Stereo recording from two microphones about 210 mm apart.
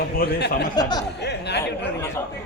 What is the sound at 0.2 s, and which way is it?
Speech, 50° left (ahead or behind).